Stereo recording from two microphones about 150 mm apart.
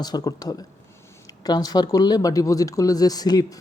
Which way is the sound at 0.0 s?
25° left (ahead or behind).